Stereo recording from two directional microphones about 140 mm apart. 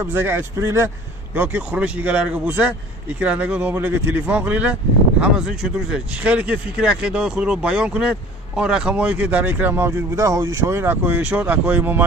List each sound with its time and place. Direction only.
0.0 s speech: 15° right (ahead or behind)